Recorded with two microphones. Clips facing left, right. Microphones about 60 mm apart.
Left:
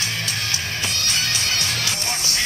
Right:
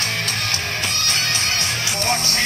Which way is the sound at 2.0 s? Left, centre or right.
Right.